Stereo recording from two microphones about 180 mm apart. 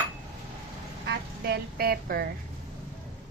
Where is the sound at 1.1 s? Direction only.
65° right (ahead or behind).